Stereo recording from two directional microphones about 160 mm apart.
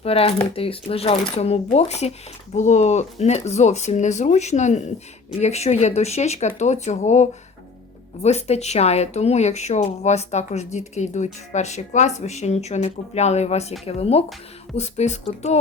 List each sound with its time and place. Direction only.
0.0 s a woman's voice: 40° left (ahead or behind)